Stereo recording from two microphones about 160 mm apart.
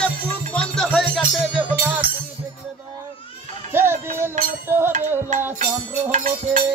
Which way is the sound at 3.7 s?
15° right (ahead or behind).